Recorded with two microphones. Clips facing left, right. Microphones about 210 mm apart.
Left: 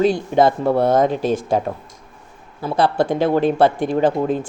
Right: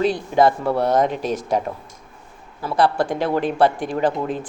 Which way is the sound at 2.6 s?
25° left (ahead or behind).